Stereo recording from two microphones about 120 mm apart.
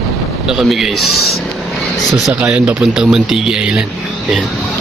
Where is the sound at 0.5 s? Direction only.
5° right (ahead or behind).